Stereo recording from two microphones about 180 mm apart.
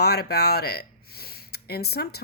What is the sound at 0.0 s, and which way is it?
A woman's voice, 65° left (ahead or behind).